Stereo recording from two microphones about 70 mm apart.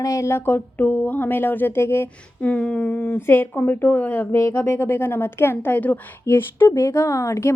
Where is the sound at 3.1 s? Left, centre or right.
Left.